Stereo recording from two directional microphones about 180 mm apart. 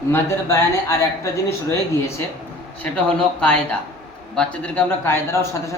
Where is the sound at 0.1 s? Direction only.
15° left (ahead or behind).